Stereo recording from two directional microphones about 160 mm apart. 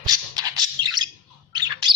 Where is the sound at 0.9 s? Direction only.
25° right (ahead or behind).